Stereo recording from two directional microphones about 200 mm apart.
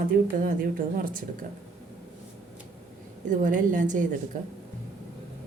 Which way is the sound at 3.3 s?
40° right (ahead or behind).